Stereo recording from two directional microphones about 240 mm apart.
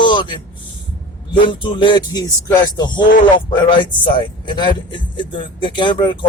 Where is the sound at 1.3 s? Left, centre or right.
Centre.